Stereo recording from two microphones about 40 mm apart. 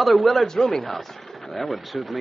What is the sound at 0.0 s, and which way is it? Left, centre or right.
A man's voice, centre.